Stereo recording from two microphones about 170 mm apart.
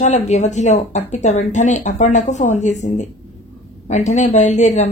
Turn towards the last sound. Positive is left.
turn(degrees=45)  # may be behind; listen again after turning